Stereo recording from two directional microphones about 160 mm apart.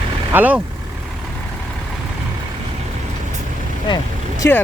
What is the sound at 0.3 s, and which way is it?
Speech, 10° right (ahead or behind).